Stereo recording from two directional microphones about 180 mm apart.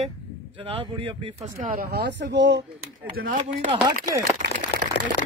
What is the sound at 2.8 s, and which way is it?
Speech, 55° right (ahead or behind).